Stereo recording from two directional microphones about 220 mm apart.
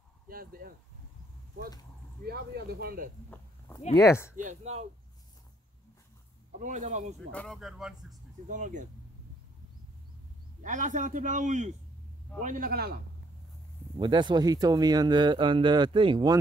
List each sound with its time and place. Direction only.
0.3 s a man's voice: 40° right (ahead or behind)
2.2 s speech: 45° right (ahead or behind)
3.9 s speech: 15° left (ahead or behind)
4.4 s a man's voice: 30° right (ahead or behind)
6.6 s a man's voice: 35° right (ahead or behind)
7.2 s speech: centre (ahead or behind)
8.5 s a man's voice: 35° right (ahead or behind)
10.6 s a man's voice: 35° right (ahead or behind)
13.9 s speech: 20° right (ahead or behind)